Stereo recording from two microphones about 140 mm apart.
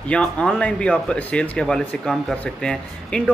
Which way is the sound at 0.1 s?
10° left (ahead or behind).